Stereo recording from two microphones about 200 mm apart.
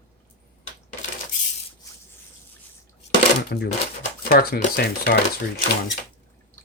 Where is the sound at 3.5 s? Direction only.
50° left (ahead or behind).